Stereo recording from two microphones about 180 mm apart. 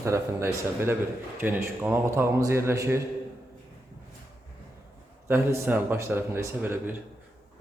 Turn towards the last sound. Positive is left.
turn(degrees=-10)  # may be behind; listen again after turning